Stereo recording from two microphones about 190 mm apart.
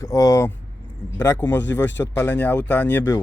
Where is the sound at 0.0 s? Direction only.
15° left (ahead or behind).